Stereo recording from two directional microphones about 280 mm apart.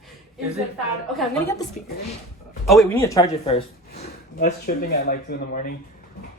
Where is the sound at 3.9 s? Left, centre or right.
Left.